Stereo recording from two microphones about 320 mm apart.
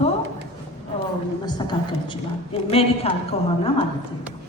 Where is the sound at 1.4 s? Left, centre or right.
Centre.